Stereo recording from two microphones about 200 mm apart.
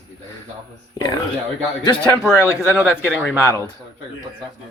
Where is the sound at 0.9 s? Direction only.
20° left (ahead or behind).